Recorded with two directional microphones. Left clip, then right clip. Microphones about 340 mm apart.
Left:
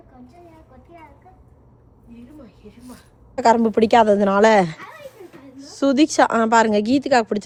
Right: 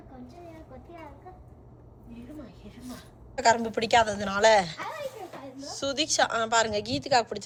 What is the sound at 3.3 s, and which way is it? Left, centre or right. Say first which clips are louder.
A woman's voice: left 8 dB; centre.